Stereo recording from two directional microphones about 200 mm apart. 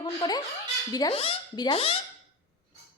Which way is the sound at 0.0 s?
20° left (ahead or behind).